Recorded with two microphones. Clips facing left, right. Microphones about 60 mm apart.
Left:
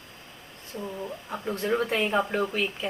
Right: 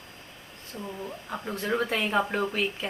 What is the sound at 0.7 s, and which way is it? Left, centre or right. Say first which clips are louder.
Speech: left 3 dB; left.